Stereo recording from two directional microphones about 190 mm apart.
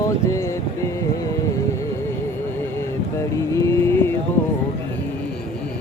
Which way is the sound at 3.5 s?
15° left (ahead or behind).